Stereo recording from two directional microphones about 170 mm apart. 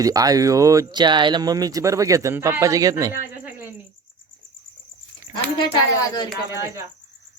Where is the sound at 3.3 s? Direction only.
10° right (ahead or behind).